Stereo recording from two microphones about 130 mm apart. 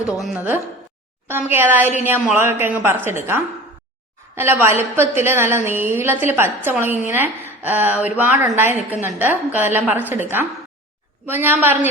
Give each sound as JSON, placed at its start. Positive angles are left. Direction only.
{"t": 0.0, "sound": "a woman's voice", "side_deg": -5}
{"t": 1.3, "sound": "a woman's voice", "side_deg": -15}